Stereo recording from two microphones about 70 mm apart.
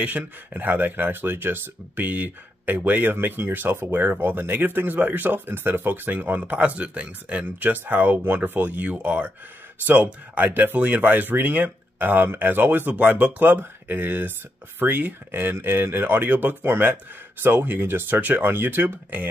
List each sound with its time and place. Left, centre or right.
0.0 s speech: right